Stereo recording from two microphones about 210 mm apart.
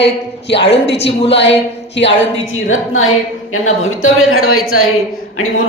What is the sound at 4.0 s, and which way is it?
Speech, 80° left.